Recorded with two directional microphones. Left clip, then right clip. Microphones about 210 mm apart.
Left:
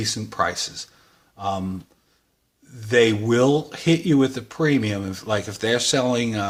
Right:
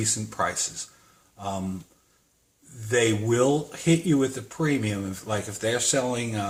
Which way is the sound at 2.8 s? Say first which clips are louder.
Left 5 dB; 40° left (ahead or behind).